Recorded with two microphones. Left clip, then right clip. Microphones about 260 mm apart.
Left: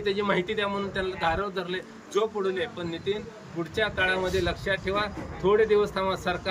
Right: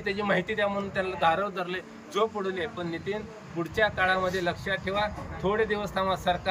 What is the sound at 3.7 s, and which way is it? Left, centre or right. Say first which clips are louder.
Speech: right 1 dB; centre.